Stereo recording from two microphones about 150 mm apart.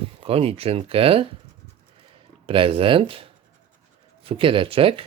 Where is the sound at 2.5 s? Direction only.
35° right (ahead or behind).